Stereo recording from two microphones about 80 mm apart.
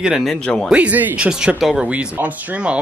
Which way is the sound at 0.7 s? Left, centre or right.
Centre.